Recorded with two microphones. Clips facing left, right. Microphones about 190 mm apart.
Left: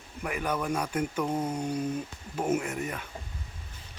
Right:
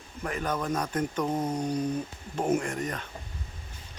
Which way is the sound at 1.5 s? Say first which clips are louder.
Right 2 dB; 10° left (ahead or behind).